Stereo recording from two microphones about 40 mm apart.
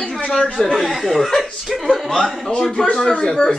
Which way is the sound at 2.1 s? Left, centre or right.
Centre.